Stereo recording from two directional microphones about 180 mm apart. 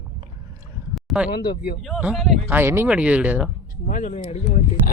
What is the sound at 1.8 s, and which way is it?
Speech, centre (ahead or behind).